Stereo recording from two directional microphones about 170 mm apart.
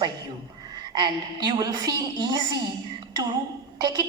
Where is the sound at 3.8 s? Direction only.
25° right (ahead or behind).